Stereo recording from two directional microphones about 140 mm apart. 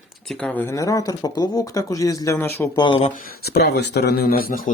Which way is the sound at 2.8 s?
35° left (ahead or behind).